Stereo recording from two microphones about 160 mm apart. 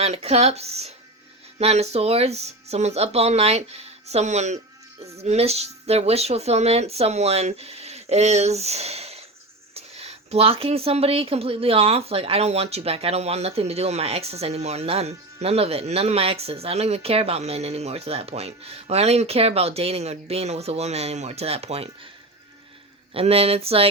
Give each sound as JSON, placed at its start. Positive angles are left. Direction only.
{"t": 0.0, "sound": "a woman's voice", "side_deg": -40}
{"t": 23.1, "sound": "a woman's voice", "side_deg": -40}